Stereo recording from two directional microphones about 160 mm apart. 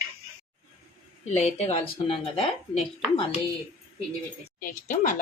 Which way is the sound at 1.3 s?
45° left (ahead or behind).